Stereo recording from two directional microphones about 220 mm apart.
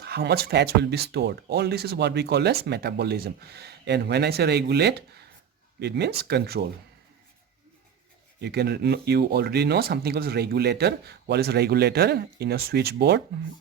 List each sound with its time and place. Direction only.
0.0 s speech: 45° right (ahead or behind)
8.4 s speech: 45° right (ahead or behind)